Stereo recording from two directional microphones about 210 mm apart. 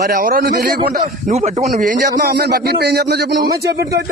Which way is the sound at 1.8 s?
45° right (ahead or behind).